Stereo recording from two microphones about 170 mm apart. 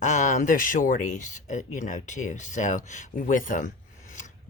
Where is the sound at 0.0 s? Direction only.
45° left (ahead or behind).